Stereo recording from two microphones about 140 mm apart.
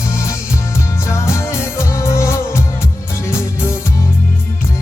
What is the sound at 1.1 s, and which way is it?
Music, 20° left (ahead or behind).